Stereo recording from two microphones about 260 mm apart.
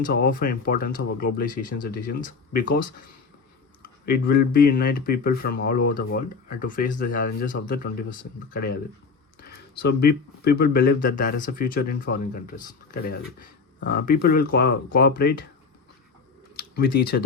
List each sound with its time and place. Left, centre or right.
0.0 s speech: left
4.0 s speech: left
16.6 s speech: left